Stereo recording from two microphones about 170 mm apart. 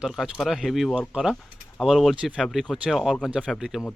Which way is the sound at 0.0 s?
Centre (ahead or behind).